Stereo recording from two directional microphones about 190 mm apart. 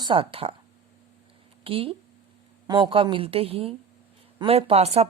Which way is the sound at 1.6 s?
30° right (ahead or behind).